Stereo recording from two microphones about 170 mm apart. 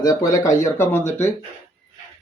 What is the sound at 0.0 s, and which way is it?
Speech, 20° left (ahead or behind).